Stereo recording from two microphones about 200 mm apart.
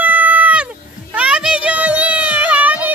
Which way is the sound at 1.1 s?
5° right (ahead or behind).